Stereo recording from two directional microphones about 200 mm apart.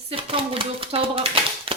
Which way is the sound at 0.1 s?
25° right (ahead or behind).